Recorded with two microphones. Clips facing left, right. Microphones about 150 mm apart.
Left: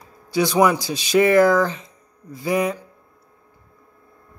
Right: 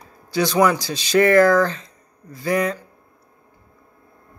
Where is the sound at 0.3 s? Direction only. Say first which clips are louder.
Even; 20° left (ahead or behind).